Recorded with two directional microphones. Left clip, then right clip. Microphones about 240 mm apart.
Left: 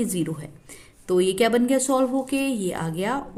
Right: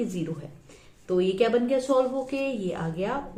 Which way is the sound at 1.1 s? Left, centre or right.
Left.